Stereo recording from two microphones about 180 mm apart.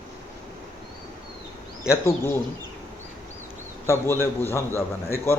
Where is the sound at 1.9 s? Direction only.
15° left (ahead or behind).